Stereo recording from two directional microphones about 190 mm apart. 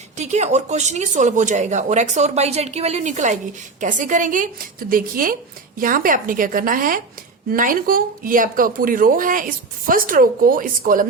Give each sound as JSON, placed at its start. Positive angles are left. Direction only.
{"t": 0.2, "sound": "a woman's voice", "side_deg": -35}